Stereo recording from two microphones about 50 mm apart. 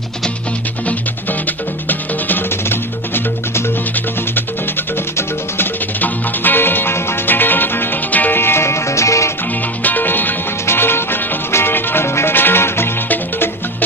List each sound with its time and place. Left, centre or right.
1.9 s music: left
5.9 s music: left
8.4 s music: left
9.8 s music: left
10.7 s music: left
13.1 s music: left